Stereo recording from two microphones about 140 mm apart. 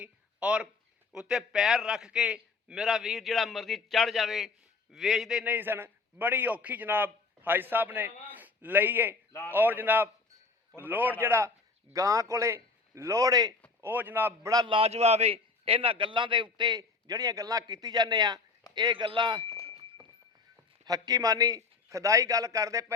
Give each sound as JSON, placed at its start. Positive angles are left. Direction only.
{"t": 0.0, "sound": "a sound", "side_deg": -10}
{"t": 1.1, "sound": "a man's voice", "side_deg": -5}
{"t": 5.5, "sound": "a man's voice", "side_deg": -15}
{"t": 13.8, "sound": "a man's voice", "side_deg": -15}
{"t": 14.5, "sound": "a man's voice", "side_deg": -30}
{"t": 14.8, "sound": "a man's voice", "side_deg": -50}
{"t": 20.8, "sound": "a man's voice", "side_deg": -25}